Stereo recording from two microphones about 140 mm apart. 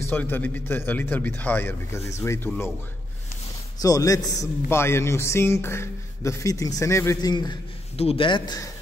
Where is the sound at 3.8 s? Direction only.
25° left (ahead or behind).